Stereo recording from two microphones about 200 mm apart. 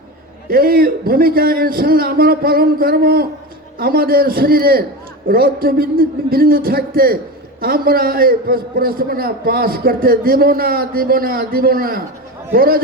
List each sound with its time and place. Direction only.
0.4 s a man's voice: 50° right (ahead or behind)